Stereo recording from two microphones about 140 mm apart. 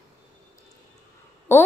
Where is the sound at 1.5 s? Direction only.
20° left (ahead or behind).